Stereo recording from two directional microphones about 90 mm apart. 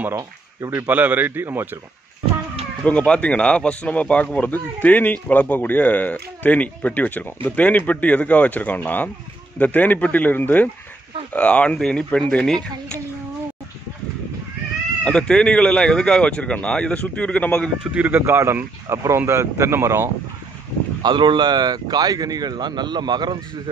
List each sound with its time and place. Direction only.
0.1 s speech: 40° right (ahead or behind)
0.7 s a man's voice: 20° right (ahead or behind)
2.8 s a man's voice: 15° left (ahead or behind)
15.0 s speech: 10° left (ahead or behind)
17.9 s a man's voice: 20° right (ahead or behind)
21.0 s speech: 60° right (ahead or behind)